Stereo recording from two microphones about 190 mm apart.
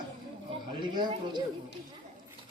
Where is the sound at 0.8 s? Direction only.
25° right (ahead or behind).